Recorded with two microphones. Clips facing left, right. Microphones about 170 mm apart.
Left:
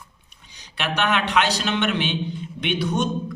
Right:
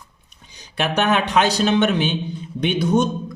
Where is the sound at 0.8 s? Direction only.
45° right (ahead or behind).